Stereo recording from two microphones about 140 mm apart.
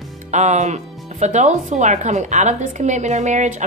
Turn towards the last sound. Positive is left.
turn(degrees=-55)  # may be behind; listen again after turning